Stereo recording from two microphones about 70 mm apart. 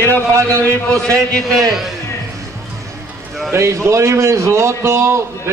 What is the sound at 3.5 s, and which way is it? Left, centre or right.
A man's voice, right.